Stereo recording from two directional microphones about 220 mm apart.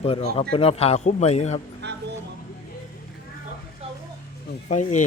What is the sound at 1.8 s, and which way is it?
Music, 50° right (ahead or behind).